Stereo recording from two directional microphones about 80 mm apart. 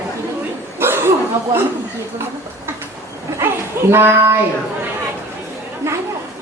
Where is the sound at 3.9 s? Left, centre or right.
Right.